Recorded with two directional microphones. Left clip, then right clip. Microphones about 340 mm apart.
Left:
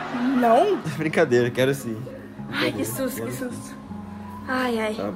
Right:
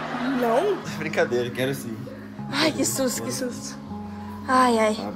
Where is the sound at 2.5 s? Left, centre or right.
Centre.